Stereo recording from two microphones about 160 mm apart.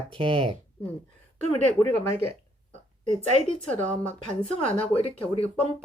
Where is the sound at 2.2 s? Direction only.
35° right (ahead or behind).